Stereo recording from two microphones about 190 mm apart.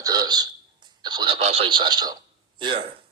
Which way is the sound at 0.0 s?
20° right (ahead or behind).